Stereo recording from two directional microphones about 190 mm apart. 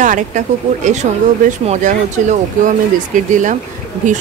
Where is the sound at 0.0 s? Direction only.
40° right (ahead or behind).